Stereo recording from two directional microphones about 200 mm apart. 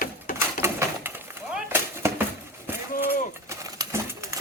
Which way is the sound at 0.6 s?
10° right (ahead or behind).